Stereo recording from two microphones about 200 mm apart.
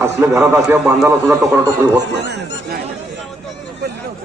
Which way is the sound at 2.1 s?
55° right (ahead or behind).